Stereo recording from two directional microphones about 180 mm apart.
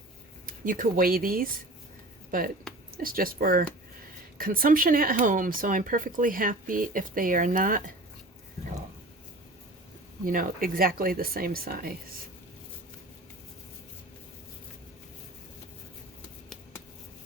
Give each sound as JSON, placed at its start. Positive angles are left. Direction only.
{"t": 0.4, "sound": "speech", "side_deg": -50}
{"t": 10.2, "sound": "a woman's voice", "side_deg": -50}